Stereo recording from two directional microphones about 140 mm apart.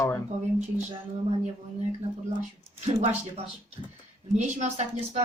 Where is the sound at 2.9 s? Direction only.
50° right (ahead or behind).